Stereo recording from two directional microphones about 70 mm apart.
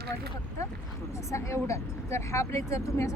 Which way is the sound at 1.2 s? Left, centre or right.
Left.